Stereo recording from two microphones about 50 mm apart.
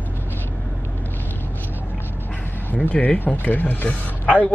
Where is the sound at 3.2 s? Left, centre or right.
Left.